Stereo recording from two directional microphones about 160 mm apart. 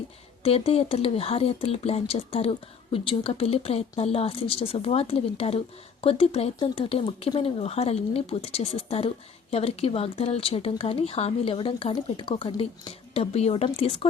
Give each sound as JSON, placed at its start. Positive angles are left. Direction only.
{"t": 0.4, "sound": "speech", "side_deg": 40}